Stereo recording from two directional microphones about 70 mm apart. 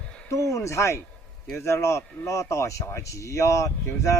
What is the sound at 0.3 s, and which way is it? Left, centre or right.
A man's voice, left.